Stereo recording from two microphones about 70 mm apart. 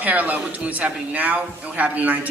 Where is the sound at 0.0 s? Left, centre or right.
Right.